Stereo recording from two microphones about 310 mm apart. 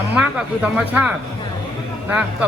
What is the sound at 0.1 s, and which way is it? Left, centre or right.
Speech, centre.